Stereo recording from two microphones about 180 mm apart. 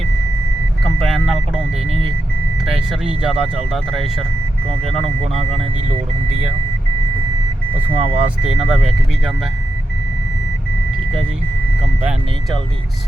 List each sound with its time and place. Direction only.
0.9 s vehicle: centre (ahead or behind)
2.6 s speech: centre (ahead or behind)
7.8 s speech: 10° right (ahead or behind)